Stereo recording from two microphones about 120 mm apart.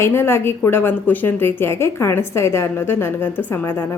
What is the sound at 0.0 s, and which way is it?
A woman's voice, 20° left (ahead or behind).